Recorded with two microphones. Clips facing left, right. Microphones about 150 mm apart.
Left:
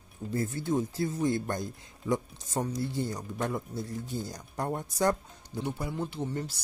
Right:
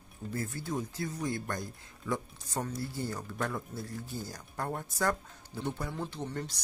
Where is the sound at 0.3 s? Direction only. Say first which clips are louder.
Left 6 dB; 25° left (ahead or behind).